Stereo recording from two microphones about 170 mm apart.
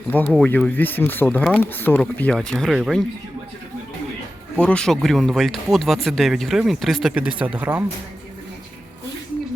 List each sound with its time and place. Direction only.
0.1 s speech: 10° left (ahead or behind)
4.6 s speech: 5° left (ahead or behind)